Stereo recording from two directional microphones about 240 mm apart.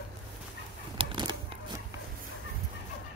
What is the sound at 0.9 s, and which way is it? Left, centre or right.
Fowl, centre.